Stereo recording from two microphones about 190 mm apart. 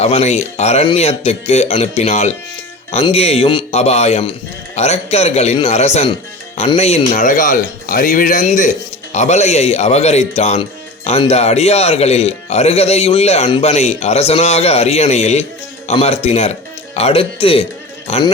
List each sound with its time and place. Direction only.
0.0 s speech: 35° left (ahead or behind)